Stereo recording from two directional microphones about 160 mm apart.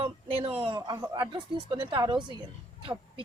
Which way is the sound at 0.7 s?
25° right (ahead or behind).